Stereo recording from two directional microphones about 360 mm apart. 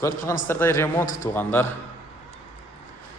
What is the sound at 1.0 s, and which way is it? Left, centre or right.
Speech, left.